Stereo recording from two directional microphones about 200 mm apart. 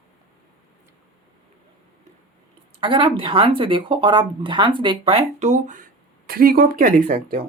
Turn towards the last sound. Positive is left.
turn(degrees=-45)  # may be behind; listen again after turning